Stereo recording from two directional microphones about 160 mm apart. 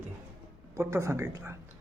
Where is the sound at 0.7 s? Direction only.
15° right (ahead or behind).